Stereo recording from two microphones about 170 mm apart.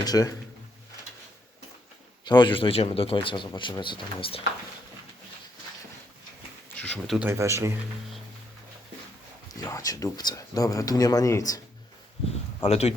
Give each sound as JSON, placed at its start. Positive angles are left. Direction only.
{"t": 0.0, "sound": "a man's voice", "side_deg": 20}
{"t": 2.2, "sound": "a man's voice", "side_deg": 25}
{"t": 6.7, "sound": "a sound", "side_deg": 5}
{"t": 7.2, "sound": "speech", "side_deg": -15}
{"t": 9.6, "sound": "a man's voice", "side_deg": 20}
{"t": 12.6, "sound": "a man's voice", "side_deg": 35}